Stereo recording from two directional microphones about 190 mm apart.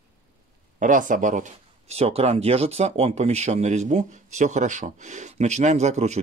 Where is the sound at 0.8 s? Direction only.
45° right (ahead or behind).